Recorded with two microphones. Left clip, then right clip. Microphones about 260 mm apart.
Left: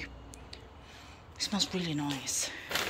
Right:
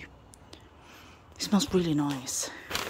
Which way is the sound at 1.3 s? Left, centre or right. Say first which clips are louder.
Right 5 dB; right.